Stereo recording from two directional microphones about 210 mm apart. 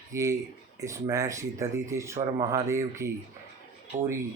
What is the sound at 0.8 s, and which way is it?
Speech, 15° right (ahead or behind).